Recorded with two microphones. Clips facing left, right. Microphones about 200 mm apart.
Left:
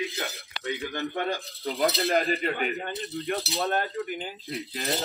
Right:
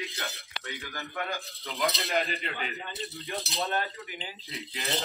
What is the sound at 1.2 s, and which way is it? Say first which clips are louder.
Speech: left 5 dB; 35° left (ahead or behind).